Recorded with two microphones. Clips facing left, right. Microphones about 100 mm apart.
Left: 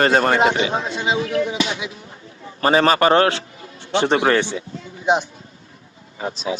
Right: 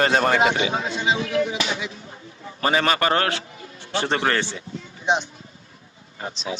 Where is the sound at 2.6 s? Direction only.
35° left (ahead or behind); by 4.6 s 15° left (ahead or behind).